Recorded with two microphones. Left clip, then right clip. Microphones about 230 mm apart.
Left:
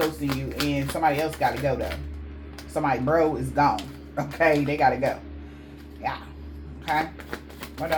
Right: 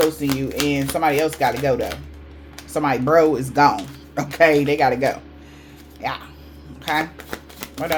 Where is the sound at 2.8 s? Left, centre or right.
Right.